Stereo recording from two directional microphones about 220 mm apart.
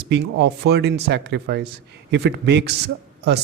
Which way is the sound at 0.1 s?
50° right (ahead or behind).